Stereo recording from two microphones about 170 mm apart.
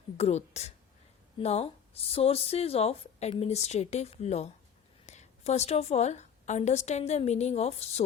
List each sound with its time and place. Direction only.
0.2 s a woman's voice: 40° left (ahead or behind)